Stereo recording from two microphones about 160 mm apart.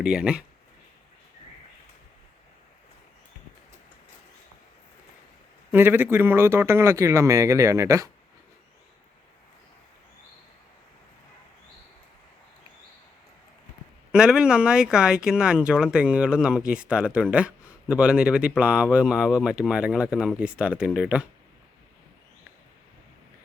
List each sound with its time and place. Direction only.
0.0 s speech: 5° right (ahead or behind)
5.7 s speech: 10° right (ahead or behind)
14.1 s speech: 5° right (ahead or behind)